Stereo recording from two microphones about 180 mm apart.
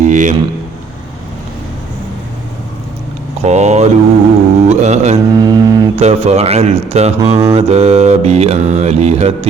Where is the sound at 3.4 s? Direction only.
40° right (ahead or behind).